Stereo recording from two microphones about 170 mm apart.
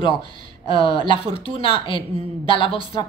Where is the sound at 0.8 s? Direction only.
30° left (ahead or behind).